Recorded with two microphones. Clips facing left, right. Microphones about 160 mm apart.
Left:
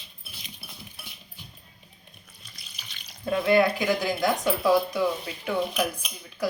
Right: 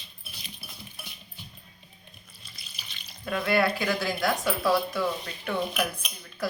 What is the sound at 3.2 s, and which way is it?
Speech, 20° left (ahead or behind).